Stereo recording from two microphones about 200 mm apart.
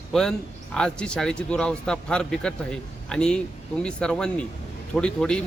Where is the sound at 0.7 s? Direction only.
5° left (ahead or behind).